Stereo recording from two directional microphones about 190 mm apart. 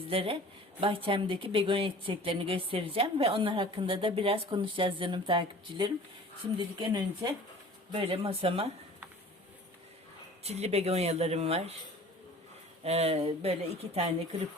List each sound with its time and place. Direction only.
0.1 s a woman's voice: 30° right (ahead or behind)
10.4 s speech: 35° right (ahead or behind)
12.8 s speech: 35° right (ahead or behind)